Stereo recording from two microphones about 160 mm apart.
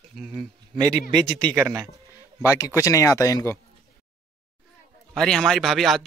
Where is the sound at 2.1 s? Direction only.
20° left (ahead or behind).